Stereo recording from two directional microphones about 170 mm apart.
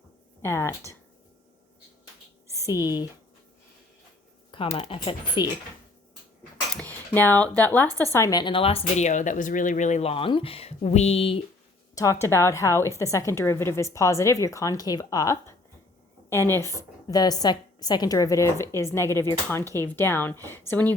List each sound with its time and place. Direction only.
0.4 s a woman's voice: 15° left (ahead or behind)
2.6 s speech: 20° left (ahead or behind)
4.5 s speech: 35° left (ahead or behind)
6.7 s speech: 10° left (ahead or behind); by 11.4 s 35° left (ahead or behind)
11.9 s a woman's voice: 15° left (ahead or behind)